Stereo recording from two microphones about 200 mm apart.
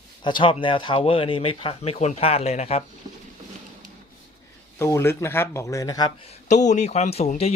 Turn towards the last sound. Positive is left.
turn(degrees=30)  # may be behind; listen again after turning